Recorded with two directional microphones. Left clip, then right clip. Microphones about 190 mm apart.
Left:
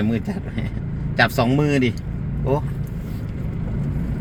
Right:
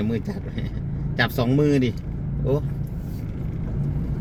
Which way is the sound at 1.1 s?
10° left (ahead or behind).